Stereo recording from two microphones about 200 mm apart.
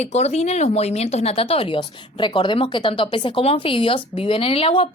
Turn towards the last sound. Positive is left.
turn(degrees=30)  # may be behind; listen again after turning